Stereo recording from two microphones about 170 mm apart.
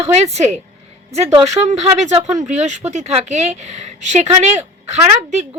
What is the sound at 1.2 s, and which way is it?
Speech, 20° right (ahead or behind).